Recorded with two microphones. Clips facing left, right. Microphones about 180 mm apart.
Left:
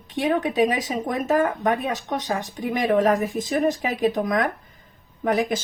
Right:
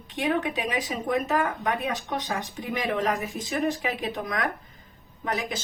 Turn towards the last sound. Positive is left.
turn(degrees=50)  # may be behind; listen again after turning